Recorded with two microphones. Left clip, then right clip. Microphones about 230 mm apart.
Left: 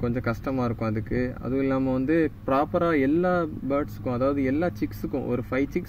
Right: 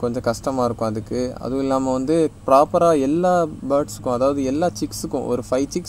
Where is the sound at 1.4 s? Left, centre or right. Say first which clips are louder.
Right 5 dB; right.